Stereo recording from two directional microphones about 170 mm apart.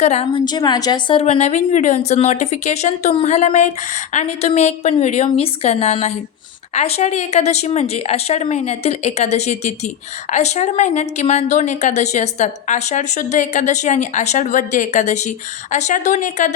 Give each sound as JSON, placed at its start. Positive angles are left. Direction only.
{"t": 0.0, "sound": "a woman's voice", "side_deg": 40}
{"t": 0.4, "sound": "a woman's voice", "side_deg": 25}
{"t": 1.2, "sound": "a woman's voice", "side_deg": 40}